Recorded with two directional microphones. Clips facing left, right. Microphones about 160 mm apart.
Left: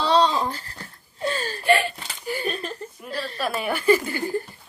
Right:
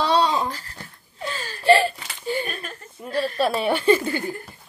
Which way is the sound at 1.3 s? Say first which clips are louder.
Left 5 dB; 40° left (ahead or behind).